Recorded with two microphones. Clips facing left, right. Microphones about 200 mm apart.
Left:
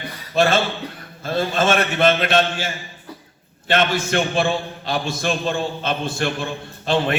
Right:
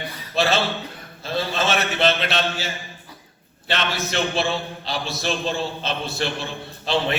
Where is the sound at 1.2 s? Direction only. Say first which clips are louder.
Left 4 dB; 50° left (ahead or behind).